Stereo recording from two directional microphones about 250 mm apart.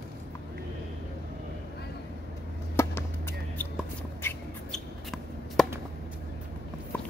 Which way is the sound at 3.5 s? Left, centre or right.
Centre.